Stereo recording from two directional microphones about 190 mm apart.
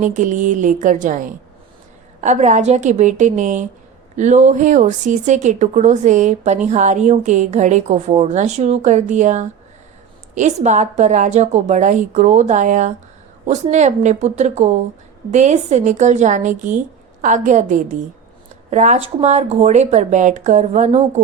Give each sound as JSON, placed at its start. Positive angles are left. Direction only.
{"t": 0.0, "sound": "speech", "side_deg": -40}